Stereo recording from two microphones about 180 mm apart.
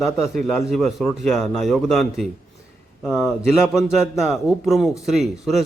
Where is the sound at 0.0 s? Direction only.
Centre (ahead or behind).